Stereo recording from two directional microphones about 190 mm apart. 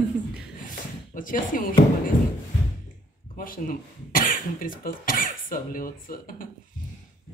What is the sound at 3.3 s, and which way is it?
Speech, 45° left (ahead or behind).